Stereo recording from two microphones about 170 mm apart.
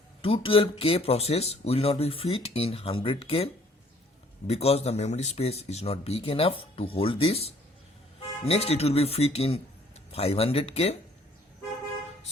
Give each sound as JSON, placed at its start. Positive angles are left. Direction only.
{"t": 0.2, "sound": "speech", "side_deg": 30}